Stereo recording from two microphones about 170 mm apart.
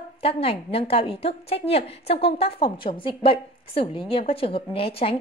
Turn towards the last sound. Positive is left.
turn(degrees=35)  # may be behind; listen again after turning